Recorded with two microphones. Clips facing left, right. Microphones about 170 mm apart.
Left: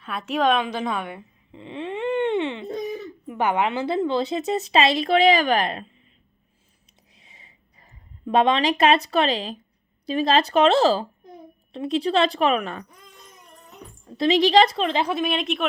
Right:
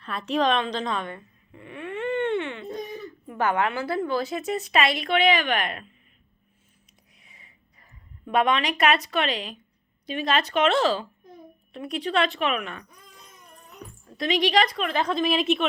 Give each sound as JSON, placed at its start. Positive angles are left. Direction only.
{"t": 0.0, "sound": "a woman's voice", "side_deg": 0}
{"t": 1.5, "sound": "speech", "side_deg": 20}
{"t": 7.2, "sound": "a sound", "side_deg": 25}
{"t": 8.3, "sound": "speech", "side_deg": 30}
{"t": 14.2, "sound": "a woman's voice", "side_deg": 30}
{"t": 14.9, "sound": "a woman's voice", "side_deg": 10}